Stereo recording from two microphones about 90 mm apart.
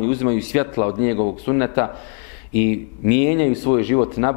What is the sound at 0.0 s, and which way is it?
Speech, 20° left (ahead or behind).